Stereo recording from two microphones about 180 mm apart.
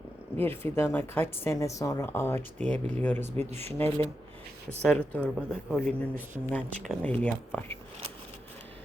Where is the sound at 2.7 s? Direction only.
40° right (ahead or behind).